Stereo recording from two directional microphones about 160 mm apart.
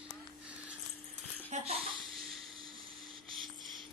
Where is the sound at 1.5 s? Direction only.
40° right (ahead or behind).